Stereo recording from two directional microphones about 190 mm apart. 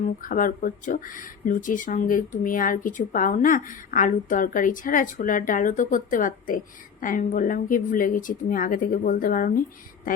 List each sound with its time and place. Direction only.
0.2 s speech: 45° left (ahead or behind)